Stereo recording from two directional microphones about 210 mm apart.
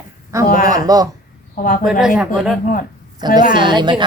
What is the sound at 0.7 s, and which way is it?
Speech, 15° right (ahead or behind).